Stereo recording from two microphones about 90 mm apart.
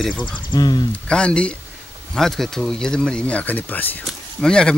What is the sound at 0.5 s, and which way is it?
Speech, 45° left (ahead or behind).